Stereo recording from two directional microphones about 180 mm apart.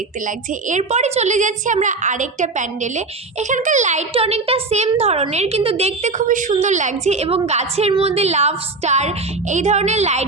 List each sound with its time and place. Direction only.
0.7 s a woman's voice: 40° right (ahead or behind)